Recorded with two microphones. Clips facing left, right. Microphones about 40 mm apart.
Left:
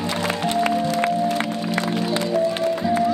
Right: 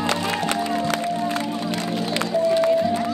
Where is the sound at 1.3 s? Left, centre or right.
Left.